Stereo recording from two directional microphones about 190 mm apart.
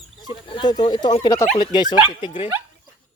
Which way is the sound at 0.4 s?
25° left (ahead or behind).